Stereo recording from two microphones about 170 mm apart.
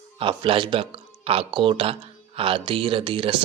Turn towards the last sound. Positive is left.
turn(degrees=-30)  # may be behind; listen again after turning